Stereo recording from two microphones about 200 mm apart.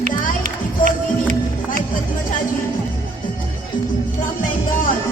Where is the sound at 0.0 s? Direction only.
40° right (ahead or behind).